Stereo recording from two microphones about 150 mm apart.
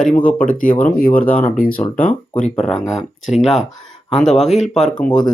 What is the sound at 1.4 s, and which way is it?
Speech, 65° left (ahead or behind).